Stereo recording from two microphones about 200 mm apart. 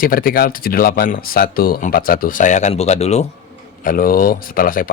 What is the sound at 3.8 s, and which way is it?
Speech, 45° left (ahead or behind).